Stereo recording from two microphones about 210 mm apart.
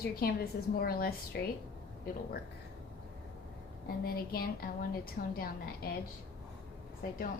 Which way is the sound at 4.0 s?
45° left (ahead or behind).